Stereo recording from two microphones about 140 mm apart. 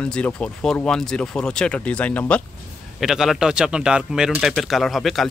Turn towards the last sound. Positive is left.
turn(degrees=0)  # may be behind; listen again after turning